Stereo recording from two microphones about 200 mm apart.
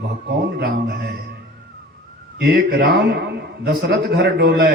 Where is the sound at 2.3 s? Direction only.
55° right (ahead or behind).